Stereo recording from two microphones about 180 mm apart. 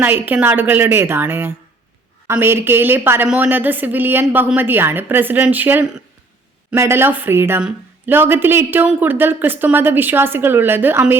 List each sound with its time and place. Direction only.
0.0 s a woman's voice: 10° right (ahead or behind)